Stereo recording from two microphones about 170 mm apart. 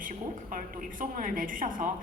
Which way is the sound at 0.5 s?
55° right (ahead or behind).